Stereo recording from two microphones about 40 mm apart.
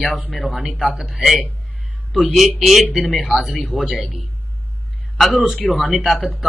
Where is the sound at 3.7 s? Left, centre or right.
Right.